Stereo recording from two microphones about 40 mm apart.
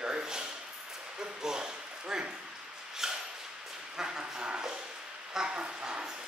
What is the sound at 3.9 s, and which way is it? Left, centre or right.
Speech, centre.